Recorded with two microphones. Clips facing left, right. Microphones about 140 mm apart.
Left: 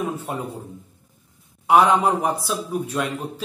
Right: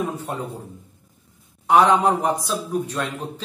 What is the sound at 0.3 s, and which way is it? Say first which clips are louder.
Speech: even; 10° left (ahead or behind).